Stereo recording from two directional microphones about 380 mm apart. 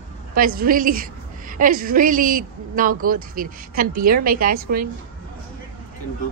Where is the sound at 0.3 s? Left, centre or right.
Right.